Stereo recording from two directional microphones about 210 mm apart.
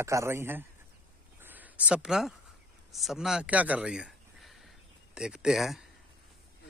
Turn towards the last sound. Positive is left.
turn(degrees=0)  # may be behind; listen again after turning